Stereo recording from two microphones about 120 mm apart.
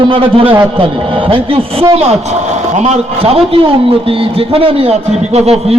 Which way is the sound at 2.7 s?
65° right (ahead or behind).